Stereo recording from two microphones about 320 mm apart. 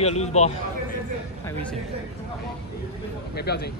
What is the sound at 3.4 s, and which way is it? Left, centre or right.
Speech, left.